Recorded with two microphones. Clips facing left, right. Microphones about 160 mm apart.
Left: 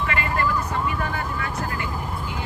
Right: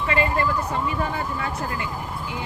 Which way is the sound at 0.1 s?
25° right (ahead or behind).